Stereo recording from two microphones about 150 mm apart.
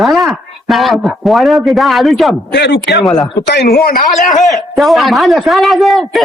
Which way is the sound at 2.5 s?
90° left.